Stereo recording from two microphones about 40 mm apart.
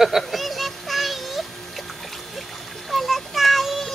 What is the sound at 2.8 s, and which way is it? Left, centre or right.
Child singing, centre.